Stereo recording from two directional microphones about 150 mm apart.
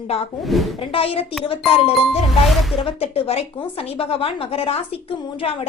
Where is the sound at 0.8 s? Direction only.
40° left (ahead or behind).